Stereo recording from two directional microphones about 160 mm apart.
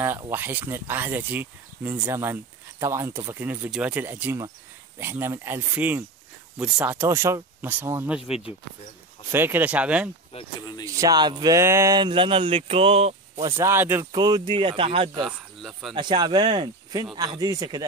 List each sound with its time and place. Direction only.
0.3 s speech: 10° right (ahead or behind)
9.3 s speech: 15° right (ahead or behind)
10.3 s speech: 30° left (ahead or behind)
10.9 s speech: 20° right (ahead or behind); by 13.1 s 40° right (ahead or behind)
13.6 s speech: 15° right (ahead or behind)
14.1 s speech: 25° right (ahead or behind)
15.2 s speech: centre (ahead or behind)
15.9 s speech: 30° right (ahead or behind)